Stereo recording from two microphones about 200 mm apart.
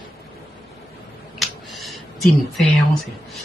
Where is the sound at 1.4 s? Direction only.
Centre (ahead or behind).